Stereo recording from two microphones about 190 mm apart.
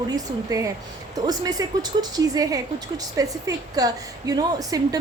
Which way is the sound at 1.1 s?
20° right (ahead or behind).